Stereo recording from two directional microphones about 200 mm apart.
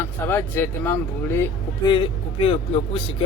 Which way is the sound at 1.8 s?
25° left (ahead or behind).